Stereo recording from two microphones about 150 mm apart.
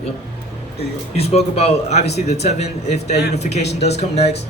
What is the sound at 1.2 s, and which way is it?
A man's voice, 40° left (ahead or behind).